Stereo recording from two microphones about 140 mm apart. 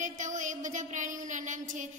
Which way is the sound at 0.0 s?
60° right (ahead or behind).